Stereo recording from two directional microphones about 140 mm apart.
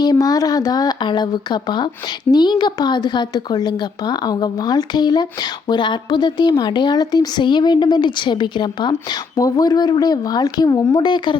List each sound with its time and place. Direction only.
0.0 s a woman's voice: 25° left (ahead or behind)